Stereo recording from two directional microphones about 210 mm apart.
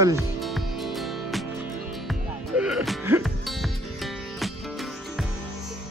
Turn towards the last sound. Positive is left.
turn(degrees=0)  # may be behind; listen again after turning